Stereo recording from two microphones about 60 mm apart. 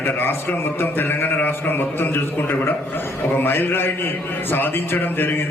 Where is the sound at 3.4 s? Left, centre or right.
Left.